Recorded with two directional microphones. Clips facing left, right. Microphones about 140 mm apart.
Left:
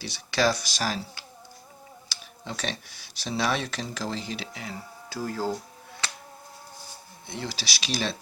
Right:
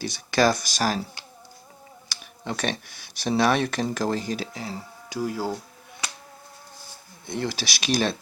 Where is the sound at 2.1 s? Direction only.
55° right (ahead or behind); by 4.8 s 35° right (ahead or behind).